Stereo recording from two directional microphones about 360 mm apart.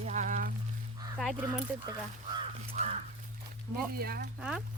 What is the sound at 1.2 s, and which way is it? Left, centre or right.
Speech, centre.